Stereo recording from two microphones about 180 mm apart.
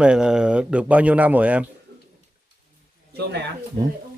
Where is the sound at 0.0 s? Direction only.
5° right (ahead or behind).